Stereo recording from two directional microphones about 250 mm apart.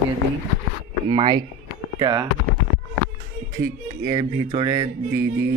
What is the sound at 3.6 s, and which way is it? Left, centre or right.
Speech, centre.